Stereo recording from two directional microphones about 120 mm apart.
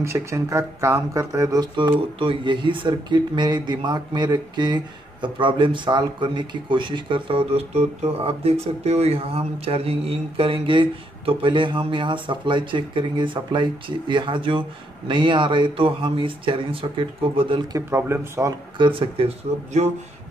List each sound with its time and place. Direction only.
0.0 s speech: 25° right (ahead or behind); by 17.6 s 50° right (ahead or behind)
17.7 s speech: 20° right (ahead or behind)
18.8 s speech: 45° right (ahead or behind)
19.8 s a sound: 70° right (ahead or behind)